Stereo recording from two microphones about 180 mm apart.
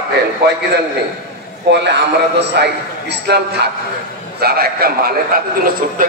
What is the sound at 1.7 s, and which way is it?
A man's voice, 70° right (ahead or behind).